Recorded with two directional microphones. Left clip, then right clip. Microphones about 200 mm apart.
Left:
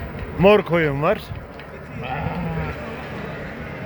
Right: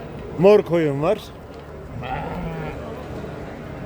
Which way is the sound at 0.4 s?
15° right (ahead or behind).